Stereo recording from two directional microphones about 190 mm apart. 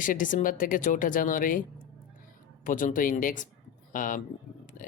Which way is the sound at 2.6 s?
45° left (ahead or behind).